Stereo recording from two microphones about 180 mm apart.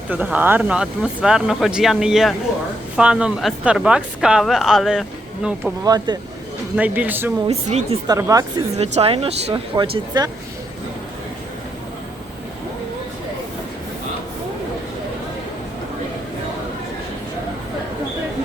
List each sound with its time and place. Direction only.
0.1 s a woman's voice: 10° right (ahead or behind)
5.8 s speech: 20° right (ahead or behind)
6.7 s speech: 10° right (ahead or behind)
7.4 s speech: 35° right (ahead or behind)
8.0 s speech: 20° right (ahead or behind)
8.8 s speech: 35° right (ahead or behind)